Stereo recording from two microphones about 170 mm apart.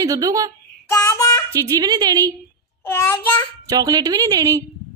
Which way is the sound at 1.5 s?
25° right (ahead or behind).